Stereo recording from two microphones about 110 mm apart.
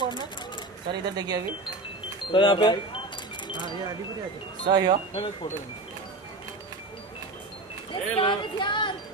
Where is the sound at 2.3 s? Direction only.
50° left (ahead or behind).